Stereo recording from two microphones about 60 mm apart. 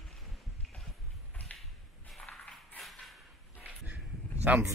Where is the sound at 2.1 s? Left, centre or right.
Centre.